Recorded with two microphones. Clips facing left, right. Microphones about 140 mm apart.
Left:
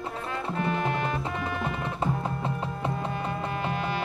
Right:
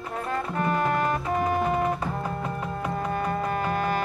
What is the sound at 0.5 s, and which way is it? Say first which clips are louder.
Music: right 3 dB; 45° right (ahead or behind).